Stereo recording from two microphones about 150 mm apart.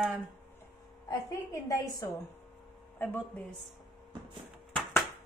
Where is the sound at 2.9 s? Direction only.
10° left (ahead or behind).